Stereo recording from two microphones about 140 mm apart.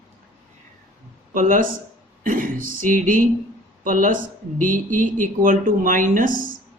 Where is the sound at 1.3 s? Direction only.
75° right (ahead or behind).